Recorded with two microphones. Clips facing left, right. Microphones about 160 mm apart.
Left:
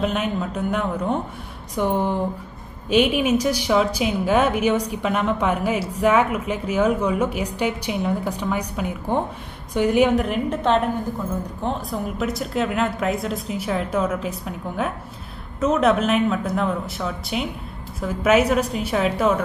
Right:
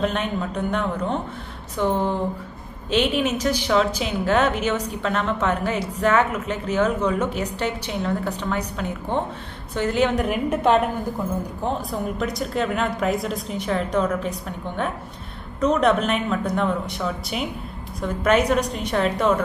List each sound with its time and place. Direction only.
0.0 s a woman's voice: 5° left (ahead or behind)
10.1 s a woman's voice: 5° right (ahead or behind)